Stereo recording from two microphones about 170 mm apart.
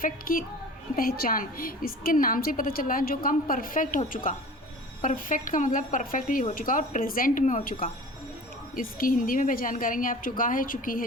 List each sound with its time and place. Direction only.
0.0 s a woman's voice: 55° left (ahead or behind)